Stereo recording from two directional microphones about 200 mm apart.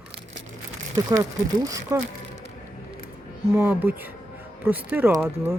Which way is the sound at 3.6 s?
5° right (ahead or behind).